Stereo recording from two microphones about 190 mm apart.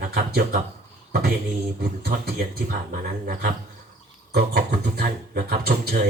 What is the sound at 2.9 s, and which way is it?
Speech, 45° right (ahead or behind).